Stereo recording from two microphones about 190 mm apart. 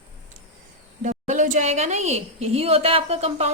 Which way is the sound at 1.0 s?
40° right (ahead or behind).